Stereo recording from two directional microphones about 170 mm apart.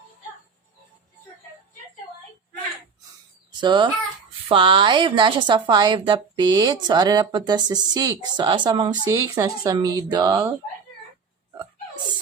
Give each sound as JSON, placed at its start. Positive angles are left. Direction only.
{"t": 3.6, "sound": "a woman's voice", "side_deg": -25}